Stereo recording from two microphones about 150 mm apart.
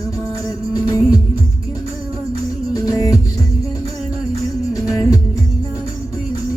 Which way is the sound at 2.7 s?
25° left (ahead or behind).